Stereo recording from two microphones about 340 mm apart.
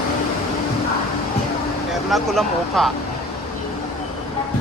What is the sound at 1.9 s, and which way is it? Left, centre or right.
Speech, centre.